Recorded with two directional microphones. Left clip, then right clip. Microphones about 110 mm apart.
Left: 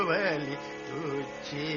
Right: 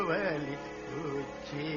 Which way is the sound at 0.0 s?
35° right (ahead or behind).